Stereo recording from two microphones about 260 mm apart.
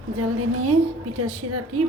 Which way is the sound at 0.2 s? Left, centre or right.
Right.